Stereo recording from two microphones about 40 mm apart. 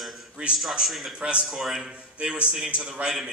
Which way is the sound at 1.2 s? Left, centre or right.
Right.